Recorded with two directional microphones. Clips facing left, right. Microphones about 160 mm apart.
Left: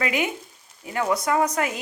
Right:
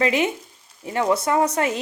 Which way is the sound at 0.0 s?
25° right (ahead or behind).